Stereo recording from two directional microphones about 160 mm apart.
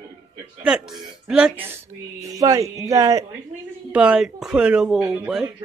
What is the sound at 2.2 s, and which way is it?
Speech, 20° right (ahead or behind).